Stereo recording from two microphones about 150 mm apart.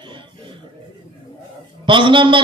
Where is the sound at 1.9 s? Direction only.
35° right (ahead or behind).